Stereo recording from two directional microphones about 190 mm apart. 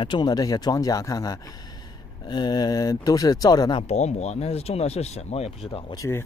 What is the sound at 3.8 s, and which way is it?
Speech, 35° left (ahead or behind).